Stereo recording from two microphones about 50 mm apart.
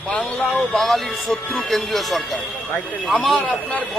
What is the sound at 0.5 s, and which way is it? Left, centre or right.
Speech, centre.